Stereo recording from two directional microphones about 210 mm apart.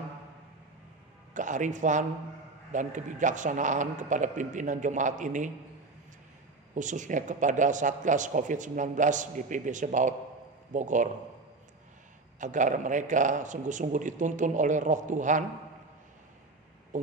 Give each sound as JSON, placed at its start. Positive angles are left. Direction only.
{"t": 1.3, "sound": "speech", "side_deg": -35}
{"t": 6.7, "sound": "speech", "side_deg": -35}
{"t": 12.4, "sound": "speech", "side_deg": -35}
{"t": 16.9, "sound": "speech", "side_deg": -35}